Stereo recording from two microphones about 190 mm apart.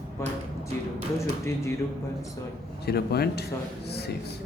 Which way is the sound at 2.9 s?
55° left (ahead or behind).